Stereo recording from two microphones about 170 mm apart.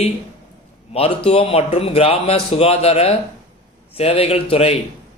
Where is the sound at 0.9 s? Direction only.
35° left (ahead or behind).